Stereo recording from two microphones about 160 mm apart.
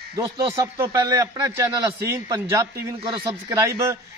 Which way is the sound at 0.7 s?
20° right (ahead or behind).